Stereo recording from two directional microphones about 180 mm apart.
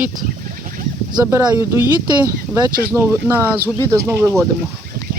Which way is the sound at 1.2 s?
15° right (ahead or behind).